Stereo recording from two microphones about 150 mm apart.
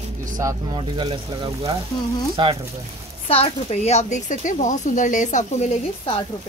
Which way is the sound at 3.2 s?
40° left (ahead or behind).